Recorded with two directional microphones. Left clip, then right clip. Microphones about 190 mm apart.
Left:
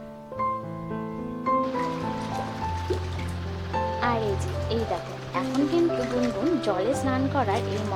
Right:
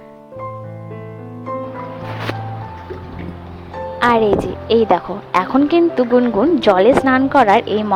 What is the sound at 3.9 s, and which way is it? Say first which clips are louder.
Music: right 15 dB; 40° right (ahead or behind).